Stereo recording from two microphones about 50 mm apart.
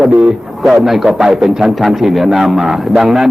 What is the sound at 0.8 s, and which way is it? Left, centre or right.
A man's voice, centre.